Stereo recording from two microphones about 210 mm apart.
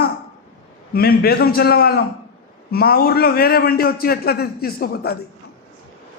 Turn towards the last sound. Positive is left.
turn(degrees=50)  # may be behind; listen again after turning